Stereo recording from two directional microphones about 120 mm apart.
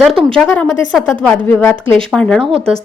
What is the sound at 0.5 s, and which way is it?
Speech, 15° left (ahead or behind).